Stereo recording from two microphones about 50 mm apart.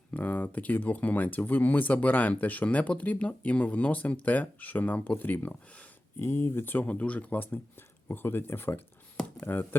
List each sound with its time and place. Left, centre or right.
0.1 s speech: left
6.1 s speech: left
6.7 s speech: left
9.2 s a sound: left